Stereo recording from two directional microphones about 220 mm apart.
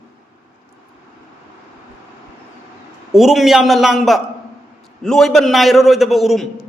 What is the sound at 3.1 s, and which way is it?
A man's voice, centre (ahead or behind).